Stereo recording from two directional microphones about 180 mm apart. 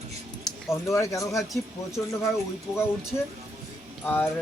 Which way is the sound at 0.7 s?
15° left (ahead or behind).